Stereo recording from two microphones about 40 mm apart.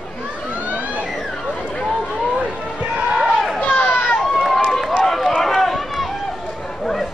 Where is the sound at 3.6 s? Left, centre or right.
Left.